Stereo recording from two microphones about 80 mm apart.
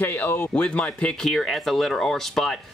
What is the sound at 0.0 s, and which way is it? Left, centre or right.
Speech, left.